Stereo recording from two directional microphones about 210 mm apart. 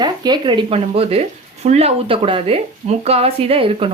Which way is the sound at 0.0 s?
20° right (ahead or behind).